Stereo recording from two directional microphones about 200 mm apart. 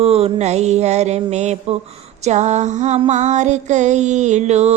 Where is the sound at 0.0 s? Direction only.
30° right (ahead or behind).